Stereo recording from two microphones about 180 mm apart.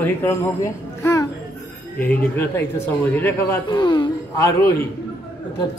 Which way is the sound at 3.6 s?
25° left (ahead or behind).